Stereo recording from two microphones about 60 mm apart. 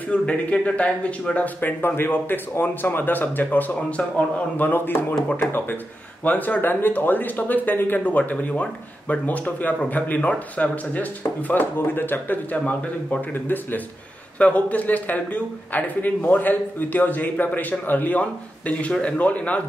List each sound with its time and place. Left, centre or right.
0.1 s a man's voice: left
6.2 s a man's voice: left
12.5 s a man's voice: left